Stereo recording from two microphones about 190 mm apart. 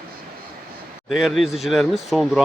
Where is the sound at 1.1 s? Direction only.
Centre (ahead or behind).